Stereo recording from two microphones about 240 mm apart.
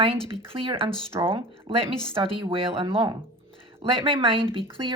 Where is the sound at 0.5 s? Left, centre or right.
Right.